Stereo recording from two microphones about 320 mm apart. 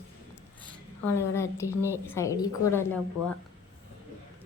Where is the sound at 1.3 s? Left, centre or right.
Centre.